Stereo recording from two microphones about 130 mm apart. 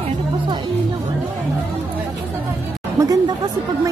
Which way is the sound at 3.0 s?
30° right (ahead or behind).